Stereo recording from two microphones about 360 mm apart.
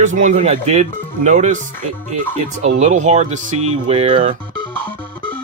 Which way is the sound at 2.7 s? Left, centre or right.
Centre.